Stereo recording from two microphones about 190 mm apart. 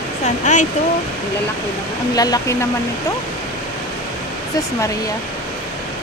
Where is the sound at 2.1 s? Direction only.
20° left (ahead or behind).